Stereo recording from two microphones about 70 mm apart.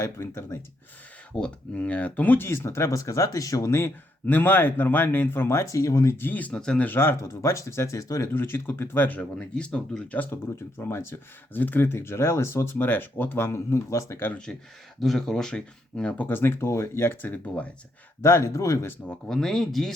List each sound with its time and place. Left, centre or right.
0.0 s speech: left
1.3 s speech: centre
2.5 s speech: left
3.8 s speech: left
6.1 s speech: left
6.6 s speech: centre
6.8 s speech: left
8.3 s speech: left
9.4 s speech: centre
10.2 s speech: left
14.5 s speech: centre
16.3 s speech: left
18.2 s speech: left
19.3 s speech: centre